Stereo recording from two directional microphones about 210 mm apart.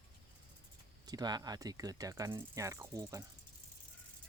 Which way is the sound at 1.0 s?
20° right (ahead or behind).